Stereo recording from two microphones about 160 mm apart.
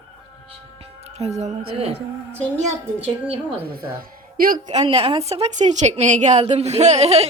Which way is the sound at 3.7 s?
65° right (ahead or behind).